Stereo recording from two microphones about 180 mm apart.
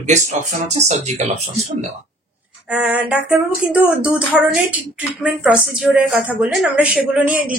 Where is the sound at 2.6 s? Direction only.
5° right (ahead or behind).